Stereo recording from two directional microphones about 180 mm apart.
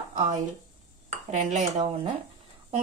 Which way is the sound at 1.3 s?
35° right (ahead or behind).